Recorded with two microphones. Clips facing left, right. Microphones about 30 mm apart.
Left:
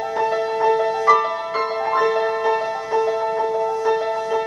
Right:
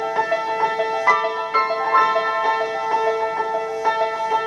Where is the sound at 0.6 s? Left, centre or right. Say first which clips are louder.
Left 2 dB; centre.